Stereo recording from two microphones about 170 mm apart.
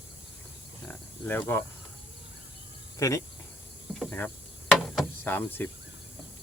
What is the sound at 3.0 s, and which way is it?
Speech, 20° left (ahead or behind).